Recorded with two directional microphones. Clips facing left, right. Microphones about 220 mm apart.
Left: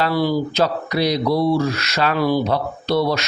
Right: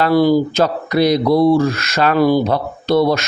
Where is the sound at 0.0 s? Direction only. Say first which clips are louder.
Right 6 dB; 45° right (ahead or behind).